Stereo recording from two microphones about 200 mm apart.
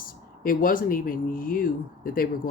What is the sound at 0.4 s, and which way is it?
Speech, 45° left (ahead or behind).